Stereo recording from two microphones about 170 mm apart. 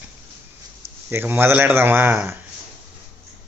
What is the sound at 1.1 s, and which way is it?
Speech, 10° right (ahead or behind).